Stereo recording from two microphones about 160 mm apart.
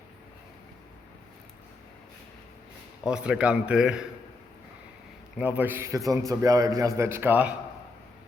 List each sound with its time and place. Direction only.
3.0 s speech: 5° right (ahead or behind)
5.4 s a man's voice: 10° right (ahead or behind)